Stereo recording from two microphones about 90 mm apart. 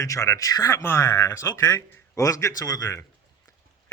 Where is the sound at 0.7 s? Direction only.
25° left (ahead or behind).